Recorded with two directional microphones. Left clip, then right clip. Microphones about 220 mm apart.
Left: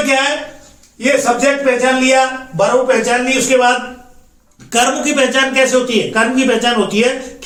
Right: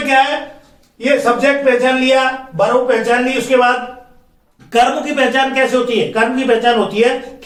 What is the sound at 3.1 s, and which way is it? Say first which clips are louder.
Speech: even; 15° left (ahead or behind).